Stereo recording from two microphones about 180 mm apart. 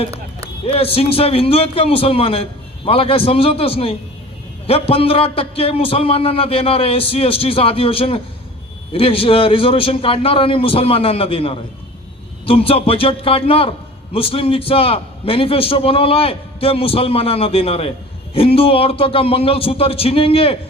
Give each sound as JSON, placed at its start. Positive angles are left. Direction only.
{"t": 0.6, "sound": "a man's voice", "side_deg": 30}